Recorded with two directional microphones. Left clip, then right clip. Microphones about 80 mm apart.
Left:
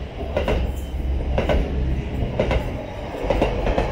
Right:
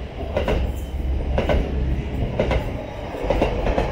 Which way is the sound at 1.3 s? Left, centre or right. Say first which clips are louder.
Even; left.